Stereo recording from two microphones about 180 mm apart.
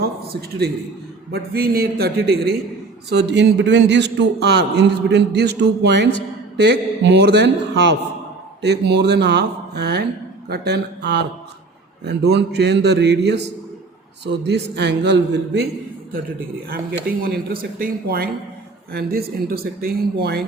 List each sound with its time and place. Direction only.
1.3 s speech: 60° right (ahead or behind)
3.1 s a man's voice: 70° right (ahead or behind)
8.6 s a man's voice: 70° right (ahead or behind)
16.6 s speech: 55° right (ahead or behind)